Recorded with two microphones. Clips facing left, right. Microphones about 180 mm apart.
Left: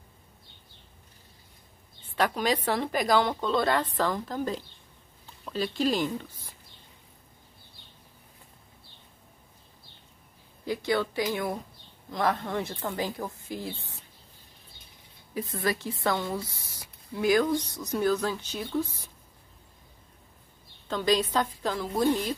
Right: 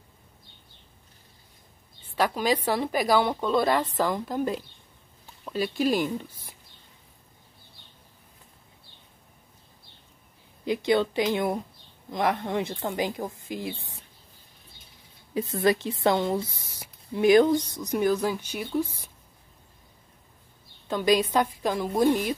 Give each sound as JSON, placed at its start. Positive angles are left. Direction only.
{"t": 2.1, "sound": "speech", "side_deg": -5}
{"t": 10.6, "sound": "speech", "side_deg": -20}
{"t": 15.3, "sound": "speech", "side_deg": -25}
{"t": 20.9, "sound": "speech", "side_deg": -10}